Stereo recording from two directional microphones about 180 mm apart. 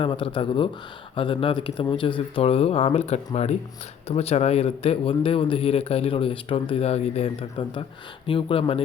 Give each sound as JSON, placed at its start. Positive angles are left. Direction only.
{"t": 0.0, "sound": "a man's voice", "side_deg": 30}